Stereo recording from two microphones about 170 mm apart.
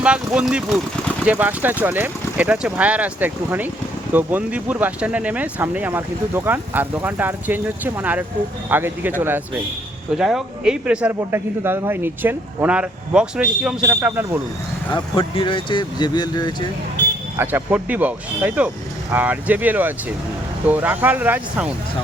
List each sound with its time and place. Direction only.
0.0 s speech: 5° right (ahead or behind)
14.9 s speech: 30° left (ahead or behind)
17.3 s speech: 10° right (ahead or behind)